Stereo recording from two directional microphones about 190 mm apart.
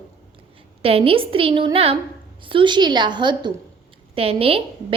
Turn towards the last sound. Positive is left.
turn(degrees=-30)  # may be behind; listen again after turning